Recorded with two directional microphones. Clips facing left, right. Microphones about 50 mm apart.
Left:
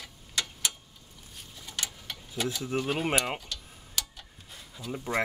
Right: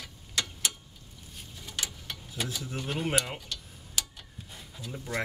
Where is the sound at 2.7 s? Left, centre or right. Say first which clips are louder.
Left 6 dB; centre.